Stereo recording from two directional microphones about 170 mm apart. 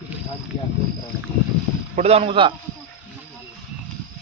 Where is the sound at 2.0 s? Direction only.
35° right (ahead or behind).